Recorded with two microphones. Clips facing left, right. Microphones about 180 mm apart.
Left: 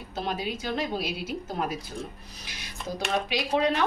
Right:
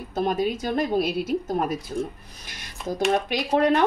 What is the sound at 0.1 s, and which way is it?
Speech, 50° right (ahead or behind).